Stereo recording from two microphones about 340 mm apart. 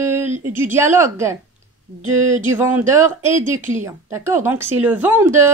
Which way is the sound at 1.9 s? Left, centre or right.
Right.